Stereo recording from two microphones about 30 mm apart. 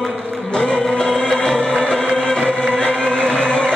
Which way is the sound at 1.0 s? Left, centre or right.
Left.